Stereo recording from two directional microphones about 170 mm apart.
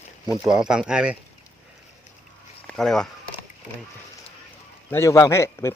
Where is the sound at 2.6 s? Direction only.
5° left (ahead or behind).